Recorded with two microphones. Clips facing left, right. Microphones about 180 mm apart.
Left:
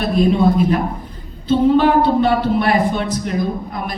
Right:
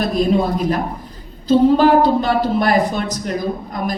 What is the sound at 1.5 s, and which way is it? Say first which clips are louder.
A woman's voice: right 1 dB; 40° right (ahead or behind).